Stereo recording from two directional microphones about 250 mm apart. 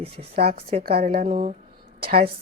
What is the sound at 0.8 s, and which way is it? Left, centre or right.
Speech, right.